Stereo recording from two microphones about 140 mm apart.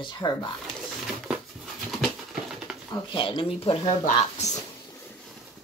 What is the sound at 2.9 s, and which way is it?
Speech, 35° left (ahead or behind).